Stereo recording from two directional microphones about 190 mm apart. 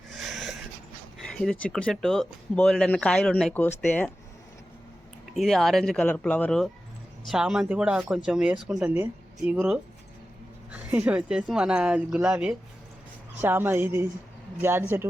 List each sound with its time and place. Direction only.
0.1 s a sound: centre (ahead or behind)
1.2 s speech: centre (ahead or behind)
5.3 s speech: centre (ahead or behind)